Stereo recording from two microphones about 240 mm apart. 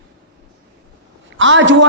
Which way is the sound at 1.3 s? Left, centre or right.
Right.